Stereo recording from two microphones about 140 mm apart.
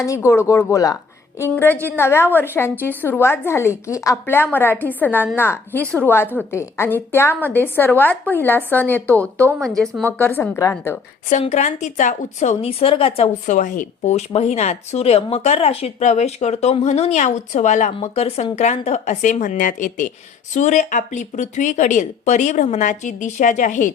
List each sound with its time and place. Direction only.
0.0 s speech: 20° left (ahead or behind)
1.5 s a woman's voice: 15° left (ahead or behind)
11.3 s speech: 55° left (ahead or behind)
13.5 s speech: 70° left (ahead or behind)